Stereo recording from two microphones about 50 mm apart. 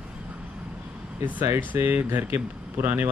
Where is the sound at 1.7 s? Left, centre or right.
Right.